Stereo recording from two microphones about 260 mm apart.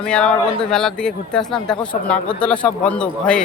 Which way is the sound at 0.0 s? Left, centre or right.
Centre.